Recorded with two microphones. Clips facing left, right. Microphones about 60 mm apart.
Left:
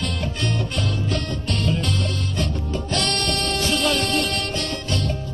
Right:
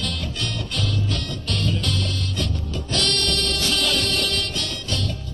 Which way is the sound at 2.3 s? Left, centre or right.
Left.